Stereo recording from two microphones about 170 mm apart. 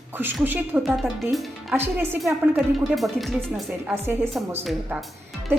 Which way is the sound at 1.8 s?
15° right (ahead or behind).